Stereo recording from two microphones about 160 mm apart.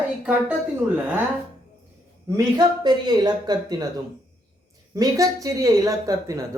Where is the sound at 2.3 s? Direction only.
25° right (ahead or behind).